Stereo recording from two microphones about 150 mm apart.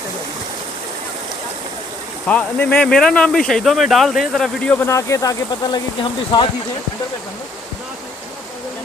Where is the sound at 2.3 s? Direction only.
10° left (ahead or behind); by 6.4 s 30° left (ahead or behind).